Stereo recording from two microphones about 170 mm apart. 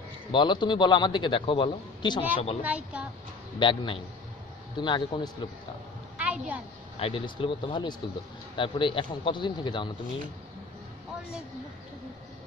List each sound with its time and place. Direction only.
0.3 s a man's voice: 30° left (ahead or behind)
2.6 s speech: 10° right (ahead or behind)
3.5 s a man's voice: 30° left (ahead or behind)
6.1 s a sound: 5° right (ahead or behind)
7.0 s a man's voice: 30° left (ahead or behind)